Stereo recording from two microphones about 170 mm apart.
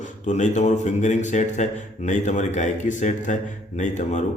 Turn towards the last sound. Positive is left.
turn(degrees=45)  # may be behind; listen again after turning